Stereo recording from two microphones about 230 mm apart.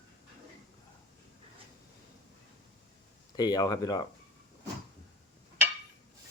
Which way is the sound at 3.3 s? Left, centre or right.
Centre.